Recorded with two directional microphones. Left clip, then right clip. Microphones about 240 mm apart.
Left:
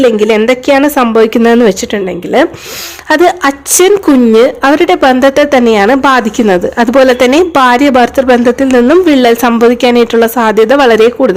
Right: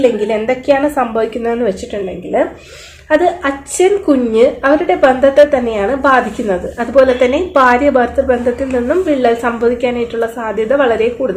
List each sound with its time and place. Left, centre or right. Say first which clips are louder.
0.3 s a woman's voice: left 6 dB; left